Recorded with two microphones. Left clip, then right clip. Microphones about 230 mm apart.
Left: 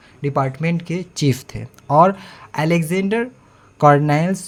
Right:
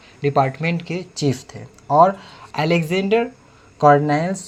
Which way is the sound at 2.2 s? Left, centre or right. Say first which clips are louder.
Even; left.